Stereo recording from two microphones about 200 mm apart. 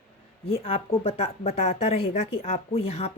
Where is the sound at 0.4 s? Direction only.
30° left (ahead or behind).